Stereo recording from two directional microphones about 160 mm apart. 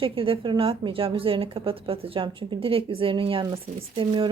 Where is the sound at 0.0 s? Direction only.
35° right (ahead or behind).